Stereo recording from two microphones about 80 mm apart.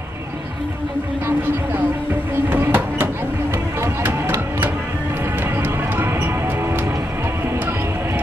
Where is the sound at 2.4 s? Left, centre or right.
Right.